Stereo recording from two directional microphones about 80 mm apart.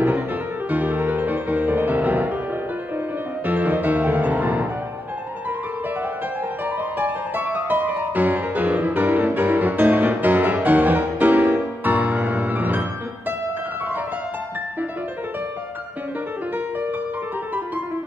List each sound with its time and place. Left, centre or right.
0.7 s music: right
3.4 s music: right
7.0 s music: right